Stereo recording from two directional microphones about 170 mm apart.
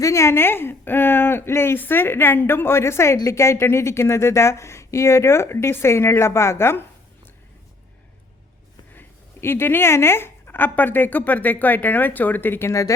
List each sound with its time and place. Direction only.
0.0 s a woman's voice: 15° left (ahead or behind)
9.0 s a woman's voice: 15° left (ahead or behind)